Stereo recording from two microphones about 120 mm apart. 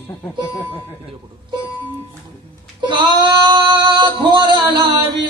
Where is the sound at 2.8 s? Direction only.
40° right (ahead or behind).